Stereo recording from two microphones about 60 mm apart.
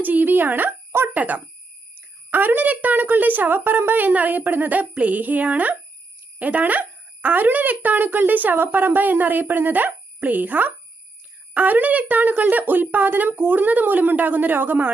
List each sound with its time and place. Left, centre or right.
0.0 s speech: right
1.1 s a woman's voice: right